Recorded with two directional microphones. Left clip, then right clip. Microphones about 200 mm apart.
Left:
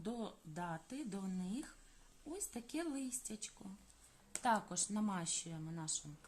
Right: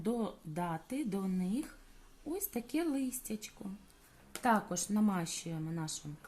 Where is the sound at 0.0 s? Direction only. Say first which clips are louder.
Right 9 dB; 20° right (ahead or behind).